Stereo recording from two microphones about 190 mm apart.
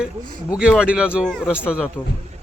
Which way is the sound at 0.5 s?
5° right (ahead or behind).